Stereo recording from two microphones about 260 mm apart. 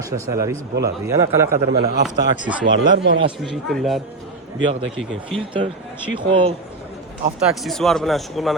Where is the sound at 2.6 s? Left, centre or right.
Right.